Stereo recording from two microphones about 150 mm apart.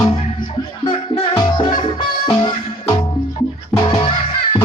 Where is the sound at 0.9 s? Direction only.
30° left (ahead or behind).